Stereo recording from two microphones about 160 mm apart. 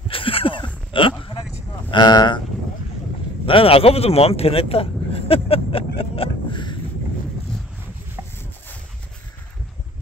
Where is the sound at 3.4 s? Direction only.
35° left (ahead or behind).